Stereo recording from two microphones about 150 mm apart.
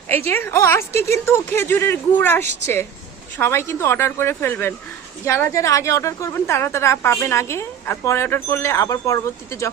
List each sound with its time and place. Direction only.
0.3 s a woman's voice: 15° left (ahead or behind)